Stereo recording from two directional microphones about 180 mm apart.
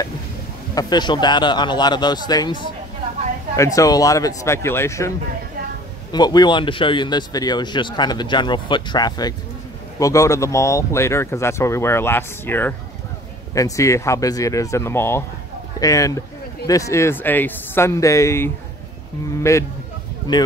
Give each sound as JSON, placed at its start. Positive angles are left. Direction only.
{"t": 0.7, "sound": "speech", "side_deg": 25}
{"t": 6.1, "sound": "speech", "side_deg": 25}